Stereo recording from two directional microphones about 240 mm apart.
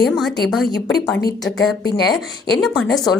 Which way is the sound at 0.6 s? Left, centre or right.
Left.